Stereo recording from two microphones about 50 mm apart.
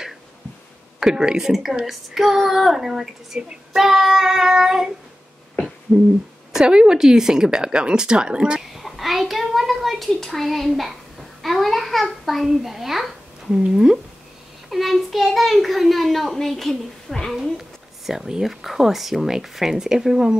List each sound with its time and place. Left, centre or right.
0.9 s speech: centre
5.9 s owl: centre
6.5 s speech: centre
8.5 s a sound: centre
13.5 s speech: centre
14.7 s a child's voice: centre
17.4 s a sound: centre
18.5 s speech: centre